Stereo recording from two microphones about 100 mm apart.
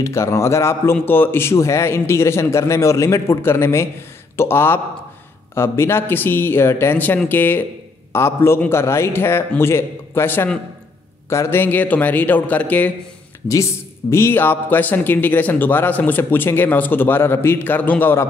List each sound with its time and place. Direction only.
0.0 s a man's voice: 30° left (ahead or behind)
13.5 s a man's voice: 30° left (ahead or behind)